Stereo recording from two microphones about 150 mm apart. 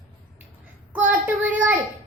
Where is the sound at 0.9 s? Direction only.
10° right (ahead or behind).